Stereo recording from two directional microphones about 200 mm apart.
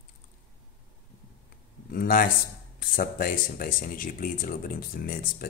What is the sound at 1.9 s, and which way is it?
Speech, 45° left (ahead or behind).